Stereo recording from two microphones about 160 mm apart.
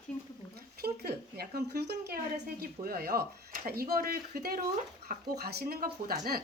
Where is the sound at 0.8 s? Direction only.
80° right.